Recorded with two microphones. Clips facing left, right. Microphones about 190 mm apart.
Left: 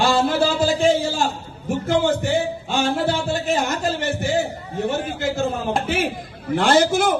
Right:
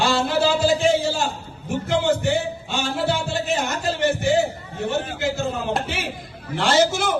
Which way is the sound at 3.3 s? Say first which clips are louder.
Left 2 dB; 50° left (ahead or behind).